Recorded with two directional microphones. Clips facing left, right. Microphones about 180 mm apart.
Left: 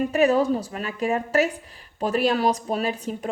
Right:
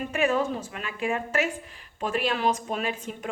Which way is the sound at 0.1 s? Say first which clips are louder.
Left 4 dB; 35° left (ahead or behind).